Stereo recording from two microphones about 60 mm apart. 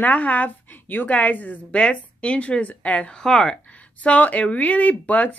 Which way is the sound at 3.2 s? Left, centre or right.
Centre.